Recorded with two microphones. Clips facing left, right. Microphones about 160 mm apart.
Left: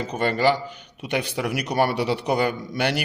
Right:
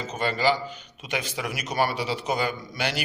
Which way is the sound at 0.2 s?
60° left (ahead or behind).